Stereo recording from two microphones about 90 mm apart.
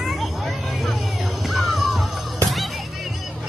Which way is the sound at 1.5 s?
Centre (ahead or behind).